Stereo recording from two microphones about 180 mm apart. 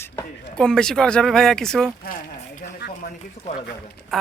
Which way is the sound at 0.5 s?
5° left (ahead or behind).